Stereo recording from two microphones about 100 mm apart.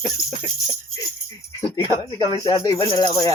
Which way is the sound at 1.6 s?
50° left (ahead or behind).